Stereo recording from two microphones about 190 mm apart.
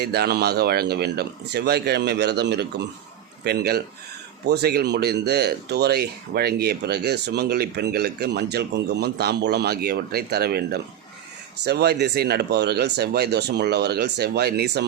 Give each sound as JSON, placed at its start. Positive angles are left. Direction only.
{"t": 0.0, "sound": "speech", "side_deg": -60}